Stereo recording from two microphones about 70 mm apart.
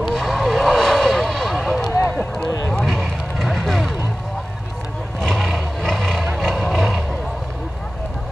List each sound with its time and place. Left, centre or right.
0.1 s vehicle: centre
2.4 s vehicle: left
2.7 s vehicle: centre
5.2 s a sound: centre